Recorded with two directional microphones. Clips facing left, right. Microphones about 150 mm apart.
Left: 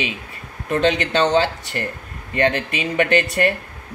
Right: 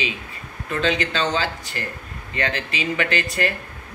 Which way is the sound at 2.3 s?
55° left (ahead or behind).